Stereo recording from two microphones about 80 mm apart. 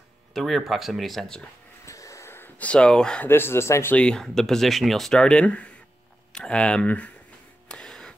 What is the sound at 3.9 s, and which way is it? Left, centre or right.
Speech, centre.